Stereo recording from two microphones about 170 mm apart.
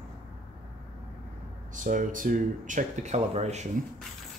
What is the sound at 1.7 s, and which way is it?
Speech, 50° right (ahead or behind).